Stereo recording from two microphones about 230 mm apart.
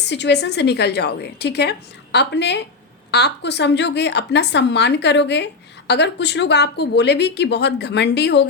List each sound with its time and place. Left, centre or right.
0.1 s speech: left